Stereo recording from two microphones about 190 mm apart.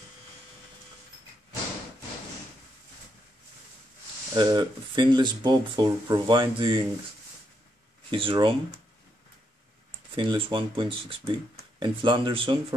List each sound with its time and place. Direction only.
4.4 s speech: 25° right (ahead or behind)
8.1 s speech: 25° right (ahead or behind)
10.1 s speech: 25° right (ahead or behind)